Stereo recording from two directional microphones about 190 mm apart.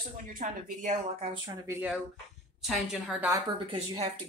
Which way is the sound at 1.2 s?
25° right (ahead or behind).